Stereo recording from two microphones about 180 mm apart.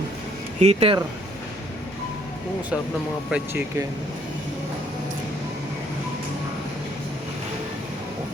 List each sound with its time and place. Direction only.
0.6 s speech: 35° right (ahead or behind)
3.2 s speech: 10° right (ahead or behind)